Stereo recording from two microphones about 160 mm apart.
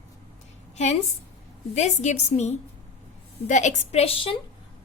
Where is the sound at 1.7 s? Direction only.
45° left (ahead or behind).